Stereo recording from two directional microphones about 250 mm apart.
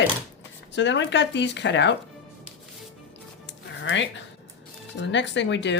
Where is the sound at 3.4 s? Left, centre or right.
Left.